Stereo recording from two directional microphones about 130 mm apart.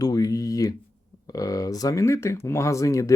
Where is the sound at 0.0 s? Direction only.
30° left (ahead or behind).